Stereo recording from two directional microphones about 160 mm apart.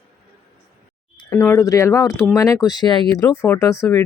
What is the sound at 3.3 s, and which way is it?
Speech, 15° left (ahead or behind).